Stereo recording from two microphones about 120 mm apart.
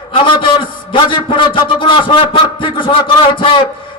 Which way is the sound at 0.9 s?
45° left (ahead or behind).